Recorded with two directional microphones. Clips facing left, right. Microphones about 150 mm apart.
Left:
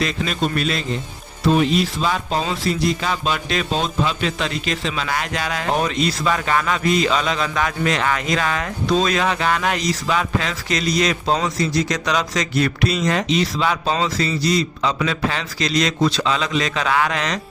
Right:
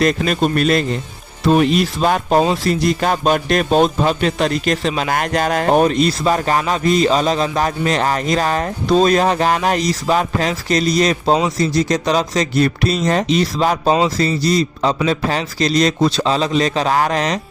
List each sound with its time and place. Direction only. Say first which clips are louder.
0.0 s a man's voice: right 6 dB; 50° right (ahead or behind)